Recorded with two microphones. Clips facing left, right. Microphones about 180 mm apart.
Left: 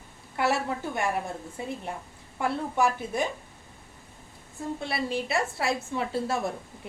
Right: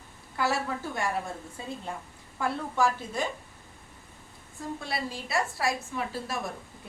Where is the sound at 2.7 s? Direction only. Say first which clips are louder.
Left 1 dB; 15° left (ahead or behind).